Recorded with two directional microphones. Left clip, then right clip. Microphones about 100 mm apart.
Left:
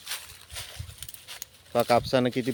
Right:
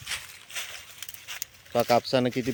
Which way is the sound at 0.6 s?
5° left (ahead or behind).